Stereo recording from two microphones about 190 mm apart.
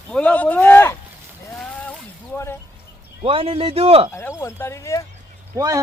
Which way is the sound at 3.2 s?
30° right (ahead or behind).